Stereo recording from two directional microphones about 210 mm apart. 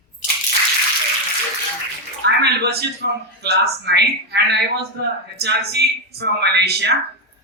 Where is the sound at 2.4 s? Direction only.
50° right (ahead or behind).